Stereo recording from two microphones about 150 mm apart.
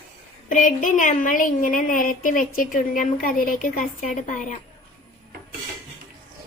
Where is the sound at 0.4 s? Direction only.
60° left (ahead or behind).